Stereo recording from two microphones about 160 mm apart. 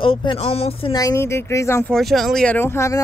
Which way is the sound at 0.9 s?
20° left (ahead or behind).